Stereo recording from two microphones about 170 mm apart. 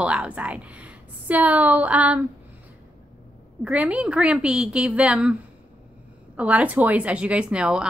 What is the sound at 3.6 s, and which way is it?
A woman's voice, 10° right (ahead or behind).